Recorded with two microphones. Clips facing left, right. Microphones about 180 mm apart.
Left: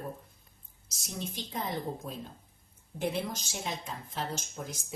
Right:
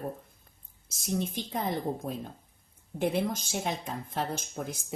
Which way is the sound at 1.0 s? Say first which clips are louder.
Right 8 dB; 55° right (ahead or behind).